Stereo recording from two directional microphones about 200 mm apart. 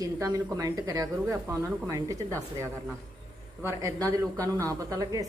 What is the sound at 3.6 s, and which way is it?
Speech, 15° right (ahead or behind).